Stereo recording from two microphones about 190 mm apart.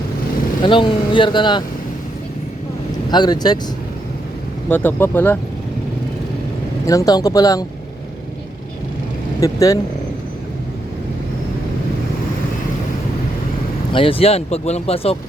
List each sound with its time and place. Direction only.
0.6 s speech: 25° left (ahead or behind)
3.1 s speech: 20° left (ahead or behind)
4.7 s speech: 10° left (ahead or behind)
6.8 s speech: 20° left (ahead or behind)
9.4 s speech: 15° left (ahead or behind)
13.9 s speech: 30° left (ahead or behind)